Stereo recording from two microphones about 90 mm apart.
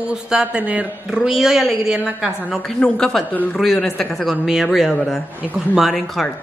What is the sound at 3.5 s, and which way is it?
A woman's voice, centre (ahead or behind).